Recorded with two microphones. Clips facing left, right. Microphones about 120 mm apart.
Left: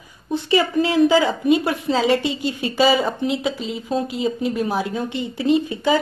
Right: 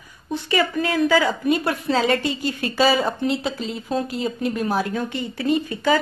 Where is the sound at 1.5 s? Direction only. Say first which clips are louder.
Left 3 dB; 15° left (ahead or behind).